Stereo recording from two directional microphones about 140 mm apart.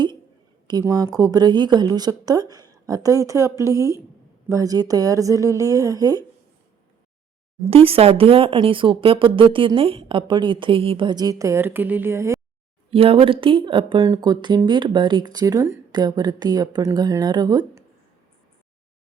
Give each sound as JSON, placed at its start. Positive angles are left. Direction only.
{"t": 0.7, "sound": "speech", "side_deg": -25}
{"t": 7.7, "sound": "speech", "side_deg": -45}
{"t": 12.9, "sound": "speech", "side_deg": -40}